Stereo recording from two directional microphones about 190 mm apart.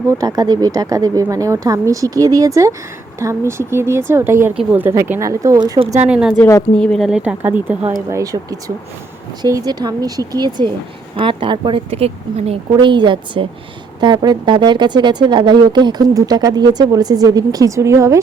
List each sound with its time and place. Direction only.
0.1 s speech: 20° right (ahead or behind)
6.1 s speech: 5° right (ahead or behind)